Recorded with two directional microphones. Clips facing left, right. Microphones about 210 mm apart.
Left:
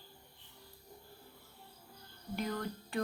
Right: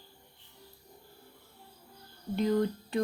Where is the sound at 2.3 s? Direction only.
20° right (ahead or behind).